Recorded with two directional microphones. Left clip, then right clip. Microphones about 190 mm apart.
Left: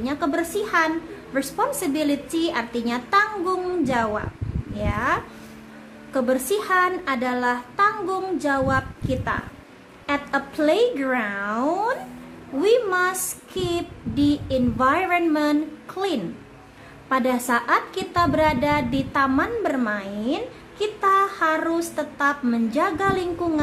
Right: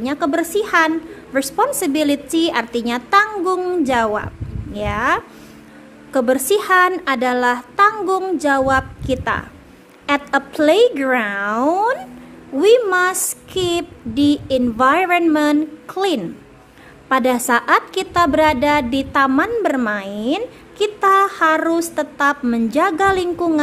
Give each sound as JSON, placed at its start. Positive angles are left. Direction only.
{"t": 0.0, "sound": "a woman's voice", "side_deg": -45}